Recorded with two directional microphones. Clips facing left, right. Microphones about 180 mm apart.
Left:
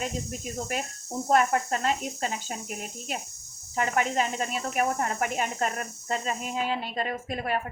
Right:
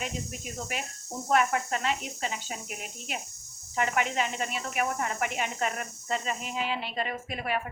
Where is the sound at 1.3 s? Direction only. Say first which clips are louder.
Left 2 dB; 40° left (ahead or behind).